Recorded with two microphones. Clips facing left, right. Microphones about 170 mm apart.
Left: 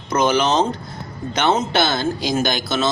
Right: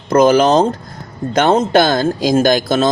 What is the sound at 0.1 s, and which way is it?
Speech, 45° right (ahead or behind).